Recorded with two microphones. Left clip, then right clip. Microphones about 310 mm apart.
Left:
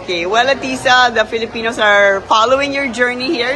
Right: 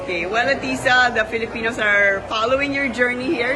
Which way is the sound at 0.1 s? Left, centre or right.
Centre.